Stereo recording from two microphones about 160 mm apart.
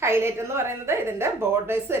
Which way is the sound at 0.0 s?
15° right (ahead or behind).